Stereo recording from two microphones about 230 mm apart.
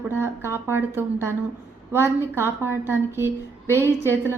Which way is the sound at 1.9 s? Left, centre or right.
Centre.